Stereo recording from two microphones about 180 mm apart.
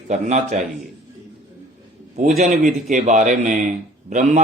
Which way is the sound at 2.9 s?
45° right (ahead or behind).